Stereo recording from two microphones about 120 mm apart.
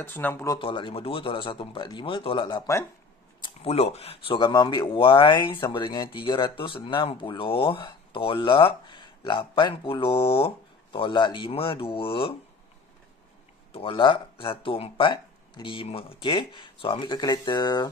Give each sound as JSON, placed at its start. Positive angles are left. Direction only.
{"t": 0.0, "sound": "speech", "side_deg": 15}
{"t": 0.6, "sound": "speech", "side_deg": 45}
{"t": 3.6, "sound": "speech", "side_deg": 60}
{"t": 4.4, "sound": "speech", "side_deg": 35}
{"t": 13.7, "sound": "speech", "side_deg": 50}